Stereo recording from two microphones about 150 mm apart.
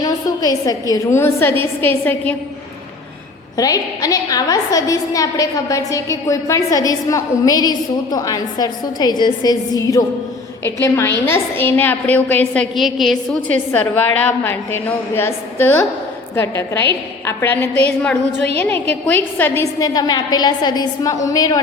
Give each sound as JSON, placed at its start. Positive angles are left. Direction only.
{"t": 0.0, "sound": "a woman's voice", "side_deg": 25}
{"t": 3.6, "sound": "a woman's voice", "side_deg": 25}
{"t": 12.7, "sound": "a woman's voice", "side_deg": 0}
{"t": 13.5, "sound": "a woman's voice", "side_deg": 10}
{"t": 19.9, "sound": "a woman's voice", "side_deg": 25}